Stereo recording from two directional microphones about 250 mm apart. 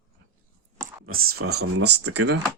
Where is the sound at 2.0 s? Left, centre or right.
Right.